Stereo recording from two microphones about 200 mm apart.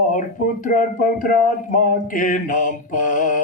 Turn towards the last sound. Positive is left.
turn(degrees=40)  # may be behind; listen again after turning